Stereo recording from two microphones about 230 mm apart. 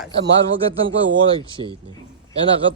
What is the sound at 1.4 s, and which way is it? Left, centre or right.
Speech, right.